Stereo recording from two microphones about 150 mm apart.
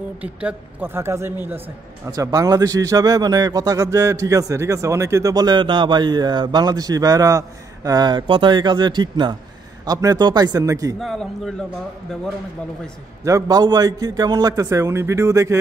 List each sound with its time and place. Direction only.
0.2 s a man's voice: 10° right (ahead or behind)
11.0 s a man's voice: centre (ahead or behind)
13.2 s a man's voice: 25° right (ahead or behind)